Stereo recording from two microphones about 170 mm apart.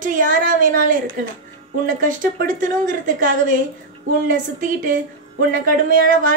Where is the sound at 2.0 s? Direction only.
55° right (ahead or behind).